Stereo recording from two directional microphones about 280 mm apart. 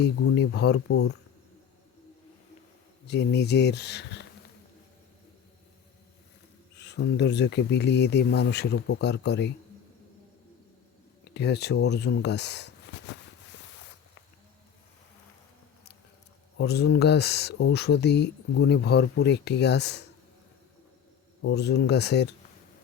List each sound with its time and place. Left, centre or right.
0.0 s speech: left
3.1 s speech: left
6.7 s speech: left
11.3 s speech: left
12.9 s a sound: left
16.6 s speech: left
21.4 s speech: left